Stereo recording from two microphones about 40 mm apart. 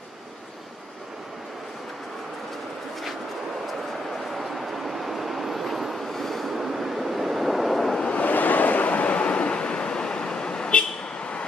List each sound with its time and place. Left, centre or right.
4.4 s vehicle: centre
8.1 s waves: left
9.2 s vehicle: left